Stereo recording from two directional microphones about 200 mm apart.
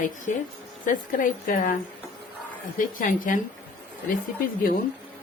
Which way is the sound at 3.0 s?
40° left (ahead or behind).